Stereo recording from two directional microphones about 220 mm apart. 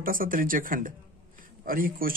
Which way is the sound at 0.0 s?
40° right (ahead or behind).